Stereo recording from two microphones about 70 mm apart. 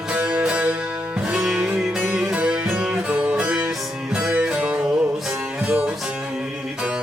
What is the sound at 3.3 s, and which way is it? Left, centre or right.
Music, centre.